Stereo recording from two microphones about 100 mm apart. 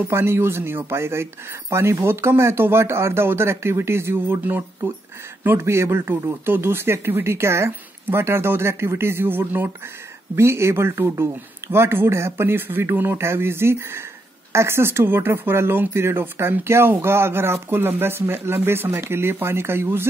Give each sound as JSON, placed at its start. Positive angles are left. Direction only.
{"t": 0.1, "sound": "speech", "side_deg": -25}